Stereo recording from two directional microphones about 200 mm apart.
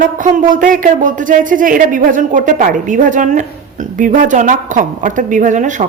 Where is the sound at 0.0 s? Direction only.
40° right (ahead or behind).